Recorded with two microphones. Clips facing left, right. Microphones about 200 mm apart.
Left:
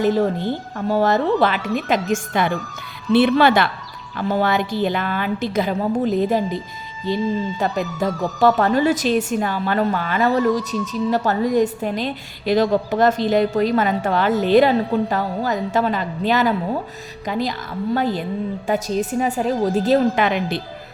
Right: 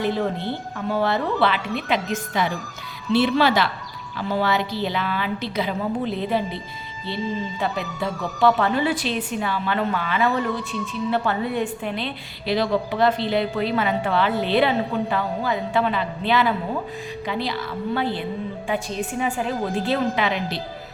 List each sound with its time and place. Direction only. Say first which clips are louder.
0.0 s a woman's voice: left 5 dB; 45° left (ahead or behind)